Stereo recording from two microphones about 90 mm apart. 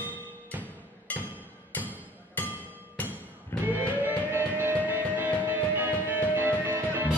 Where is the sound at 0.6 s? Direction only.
20° left (ahead or behind).